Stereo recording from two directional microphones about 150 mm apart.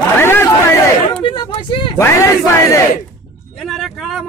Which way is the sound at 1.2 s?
30° left (ahead or behind).